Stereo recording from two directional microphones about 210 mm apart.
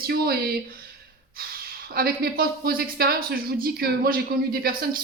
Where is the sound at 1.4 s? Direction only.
45° right (ahead or behind).